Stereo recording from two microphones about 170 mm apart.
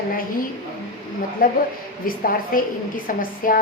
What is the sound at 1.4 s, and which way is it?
A woman's voice, 55° left (ahead or behind).